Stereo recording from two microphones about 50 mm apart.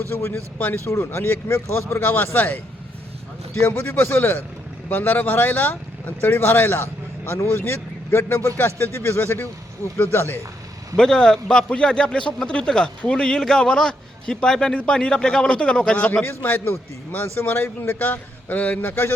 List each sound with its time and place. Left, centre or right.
0.1 s speech: left
1.9 s speech: left
3.7 s speech: left
4.9 s speech: left
7.3 s speech: left
7.6 s speech: left
10.9 s speech: centre
16.4 s speech: left
18.9 s speech: left